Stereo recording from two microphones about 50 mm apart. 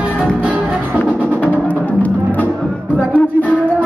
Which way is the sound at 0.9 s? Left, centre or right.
Left.